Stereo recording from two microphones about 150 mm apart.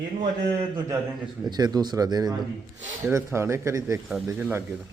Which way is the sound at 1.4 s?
25° right (ahead or behind).